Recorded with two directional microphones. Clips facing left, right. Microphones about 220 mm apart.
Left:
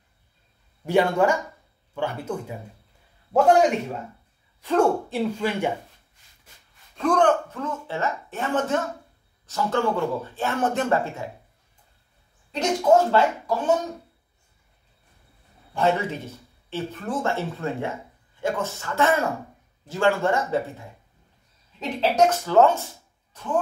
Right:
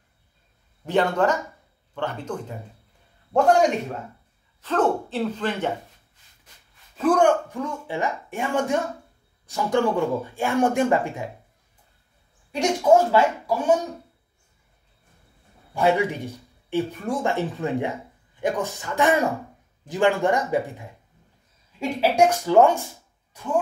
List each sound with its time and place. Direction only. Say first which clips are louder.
0.8 s speech: left 1 dB; 10° left (ahead or behind)
4.6 s speech: left 2 dB; 10° left (ahead or behind)
7.0 s speech: right 2 dB; 10° right (ahead or behind)
12.4 s speech: right 1 dB; 10° right (ahead or behind)
15.7 s speech: right 2 dB; 10° right (ahead or behind)